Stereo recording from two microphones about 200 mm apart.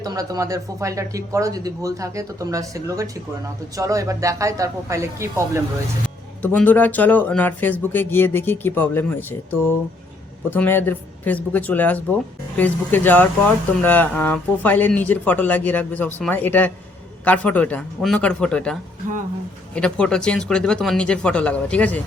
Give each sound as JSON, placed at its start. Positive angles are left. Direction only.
{"t": 0.0, "sound": "speech", "side_deg": -15}
{"t": 6.4, "sound": "speech", "side_deg": 10}